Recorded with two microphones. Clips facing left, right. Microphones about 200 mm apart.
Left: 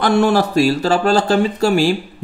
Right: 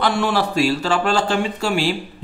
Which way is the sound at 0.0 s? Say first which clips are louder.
Left 5 dB; 45° left (ahead or behind).